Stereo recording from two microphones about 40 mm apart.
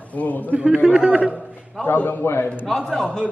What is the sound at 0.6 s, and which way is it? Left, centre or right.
Speech, right.